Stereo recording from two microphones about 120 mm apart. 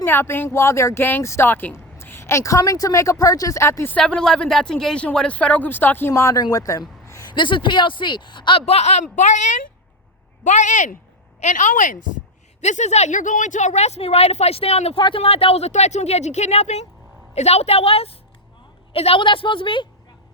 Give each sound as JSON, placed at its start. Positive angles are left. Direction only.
{"t": 0.0, "sound": "speech", "side_deg": 20}
{"t": 3.9, "sound": "speech", "side_deg": 5}
{"t": 6.4, "sound": "a sound", "side_deg": 30}
{"t": 7.3, "sound": "speech", "side_deg": 45}
{"t": 8.6, "sound": "speech", "side_deg": 65}
{"t": 9.1, "sound": "a woman's voice", "side_deg": 90}
{"t": 12.6, "sound": "a woman's voice", "side_deg": 70}